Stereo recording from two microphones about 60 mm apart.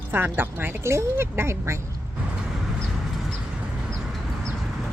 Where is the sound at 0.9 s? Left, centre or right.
Right.